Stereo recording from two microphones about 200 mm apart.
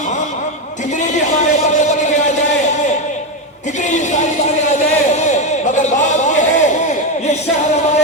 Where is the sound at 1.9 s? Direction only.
35° left (ahead or behind).